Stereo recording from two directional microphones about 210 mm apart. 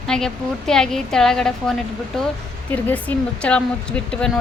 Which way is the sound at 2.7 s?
5° left (ahead or behind).